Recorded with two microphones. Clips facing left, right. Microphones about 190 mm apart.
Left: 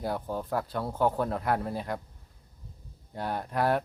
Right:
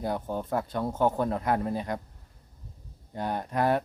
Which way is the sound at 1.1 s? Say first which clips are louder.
Right 2 dB; 5° right (ahead or behind).